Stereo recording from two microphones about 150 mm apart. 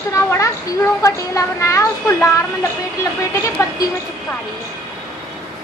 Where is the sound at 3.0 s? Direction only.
20° left (ahead or behind).